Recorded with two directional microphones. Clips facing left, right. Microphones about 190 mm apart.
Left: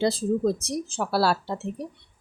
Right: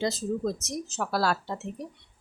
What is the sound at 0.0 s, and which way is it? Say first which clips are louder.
A woman's voice: left 5 dB; 30° left (ahead or behind).